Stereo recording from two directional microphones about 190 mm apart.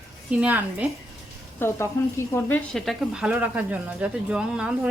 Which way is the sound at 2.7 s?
Centre (ahead or behind).